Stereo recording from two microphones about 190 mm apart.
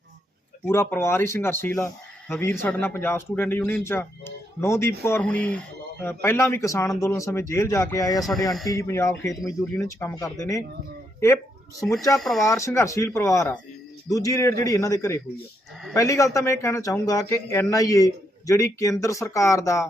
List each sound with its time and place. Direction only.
0.7 s speech: 15° left (ahead or behind)
12.1 s speech: centre (ahead or behind)
12.5 s speech: 15° left (ahead or behind)